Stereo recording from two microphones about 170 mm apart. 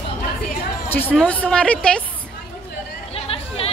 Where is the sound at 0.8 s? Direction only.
10° left (ahead or behind).